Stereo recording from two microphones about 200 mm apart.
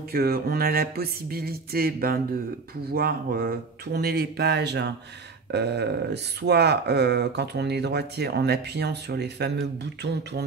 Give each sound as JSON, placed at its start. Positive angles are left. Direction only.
{"t": 0.1, "sound": "speech", "side_deg": -50}